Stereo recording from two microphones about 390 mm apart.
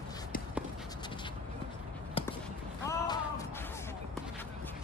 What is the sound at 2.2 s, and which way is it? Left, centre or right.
Basketball bounce, centre.